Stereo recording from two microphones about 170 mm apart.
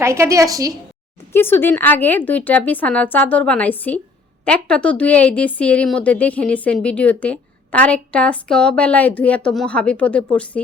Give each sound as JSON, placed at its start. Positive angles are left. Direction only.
{"t": 0.0, "sound": "a woman's voice", "side_deg": -15}
{"t": 1.3, "sound": "a woman's voice", "side_deg": 15}